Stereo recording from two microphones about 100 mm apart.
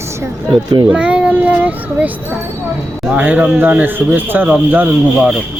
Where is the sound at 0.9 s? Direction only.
10° right (ahead or behind).